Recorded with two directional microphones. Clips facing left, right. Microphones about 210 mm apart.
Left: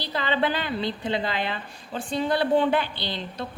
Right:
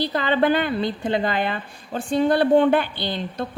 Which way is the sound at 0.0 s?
50° right (ahead or behind).